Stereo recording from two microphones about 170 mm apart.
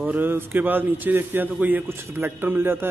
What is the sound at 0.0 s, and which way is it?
A man's voice, 10° right (ahead or behind).